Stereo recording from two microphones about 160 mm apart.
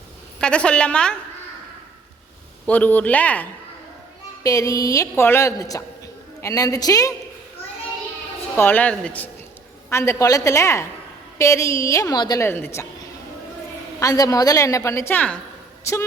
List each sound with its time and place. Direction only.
0.3 s a woman's voice: 5° left (ahead or behind)
2.6 s a man's voice: 10° left (ahead or behind)
4.4 s a woman's voice: 20° left (ahead or behind)
8.5 s a man's voice: 10° left (ahead or behind)
14.0 s a woman's voice: 20° left (ahead or behind)